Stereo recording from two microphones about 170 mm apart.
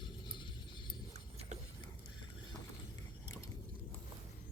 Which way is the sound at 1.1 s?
40° right (ahead or behind).